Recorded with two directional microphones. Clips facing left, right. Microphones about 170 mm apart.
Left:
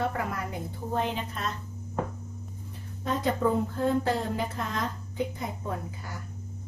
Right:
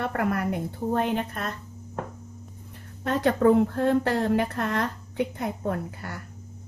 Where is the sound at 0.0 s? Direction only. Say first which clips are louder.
Right 4 dB; 60° right (ahead or behind).